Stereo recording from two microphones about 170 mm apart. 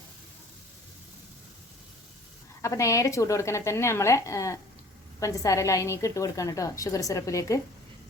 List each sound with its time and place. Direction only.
2.6 s a woman's voice: 20° left (ahead or behind)